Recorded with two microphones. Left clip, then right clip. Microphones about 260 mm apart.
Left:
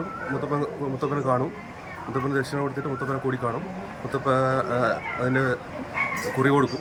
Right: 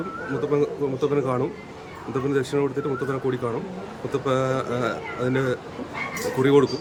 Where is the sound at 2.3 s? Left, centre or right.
Centre.